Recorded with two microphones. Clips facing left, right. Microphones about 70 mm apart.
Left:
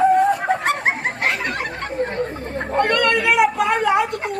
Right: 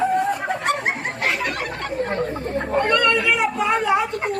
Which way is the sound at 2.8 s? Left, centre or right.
Left.